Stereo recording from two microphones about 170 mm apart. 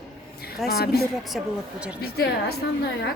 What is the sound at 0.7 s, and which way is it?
A woman's voice, 70° left (ahead or behind).